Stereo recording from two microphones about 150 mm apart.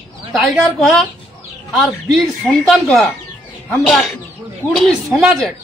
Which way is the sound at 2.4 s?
Centre (ahead or behind).